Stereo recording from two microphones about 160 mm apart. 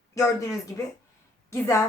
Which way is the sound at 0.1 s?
20° left (ahead or behind).